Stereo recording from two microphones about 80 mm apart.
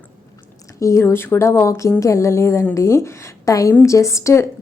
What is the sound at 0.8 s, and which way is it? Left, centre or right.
A woman's voice, left.